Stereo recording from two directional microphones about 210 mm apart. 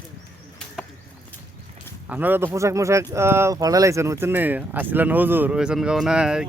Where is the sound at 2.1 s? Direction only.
10° right (ahead or behind).